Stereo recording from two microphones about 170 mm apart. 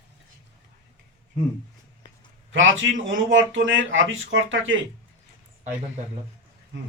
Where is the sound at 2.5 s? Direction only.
90° right.